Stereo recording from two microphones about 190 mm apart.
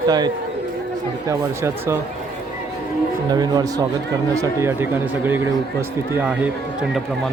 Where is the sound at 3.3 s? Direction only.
20° right (ahead or behind).